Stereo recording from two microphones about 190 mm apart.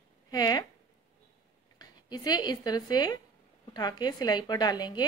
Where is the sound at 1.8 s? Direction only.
20° left (ahead or behind).